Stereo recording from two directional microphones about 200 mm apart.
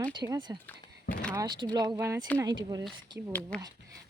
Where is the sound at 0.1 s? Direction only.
20° right (ahead or behind).